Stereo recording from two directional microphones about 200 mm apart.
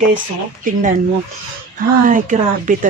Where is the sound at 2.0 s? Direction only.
40° right (ahead or behind).